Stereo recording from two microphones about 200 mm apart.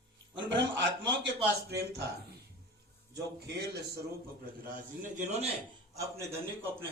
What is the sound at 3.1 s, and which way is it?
Speech, 55° right (ahead or behind).